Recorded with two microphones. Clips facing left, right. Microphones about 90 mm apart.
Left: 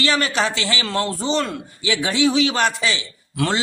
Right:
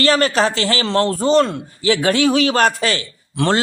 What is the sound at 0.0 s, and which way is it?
A man's voice, 40° right (ahead or behind).